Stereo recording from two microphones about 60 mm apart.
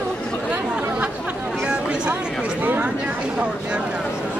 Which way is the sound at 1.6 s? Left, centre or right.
Centre.